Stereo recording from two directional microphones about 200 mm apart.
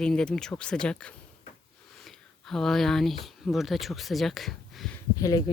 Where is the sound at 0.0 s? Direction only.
5° left (ahead or behind).